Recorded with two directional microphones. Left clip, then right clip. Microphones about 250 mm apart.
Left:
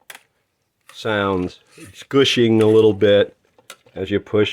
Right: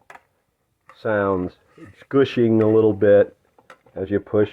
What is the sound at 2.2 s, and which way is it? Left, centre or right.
Speech, left.